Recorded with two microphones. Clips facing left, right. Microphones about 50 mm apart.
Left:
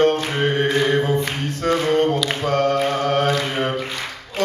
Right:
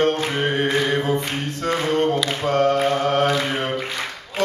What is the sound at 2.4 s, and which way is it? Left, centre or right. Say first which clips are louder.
Mantra: right 1 dB; right.